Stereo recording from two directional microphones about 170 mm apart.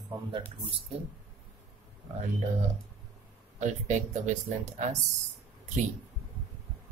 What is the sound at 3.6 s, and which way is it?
Speech, 45° right (ahead or behind).